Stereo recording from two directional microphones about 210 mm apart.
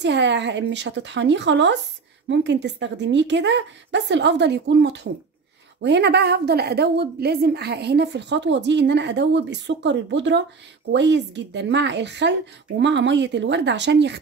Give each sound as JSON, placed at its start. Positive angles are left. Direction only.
{"t": 0.0, "sound": "a woman's voice", "side_deg": -55}